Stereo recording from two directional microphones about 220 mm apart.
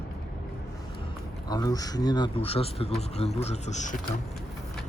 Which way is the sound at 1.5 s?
15° left (ahead or behind).